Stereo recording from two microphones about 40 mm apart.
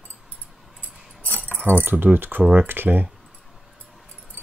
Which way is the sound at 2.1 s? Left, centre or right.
Right.